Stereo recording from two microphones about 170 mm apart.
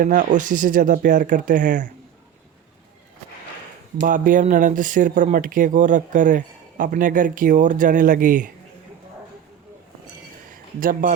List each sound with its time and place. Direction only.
0.0 s speech: 50° right (ahead or behind)
4.0 s speech: 50° right (ahead or behind)
10.8 s speech: 55° right (ahead or behind)